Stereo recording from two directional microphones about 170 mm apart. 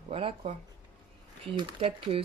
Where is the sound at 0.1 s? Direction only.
35° right (ahead or behind).